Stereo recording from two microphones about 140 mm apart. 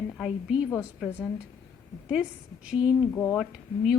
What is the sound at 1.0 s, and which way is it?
Speech, 15° left (ahead or behind).